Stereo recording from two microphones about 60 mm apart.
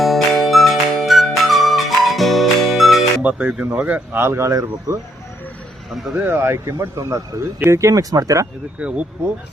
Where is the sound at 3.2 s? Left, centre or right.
Right.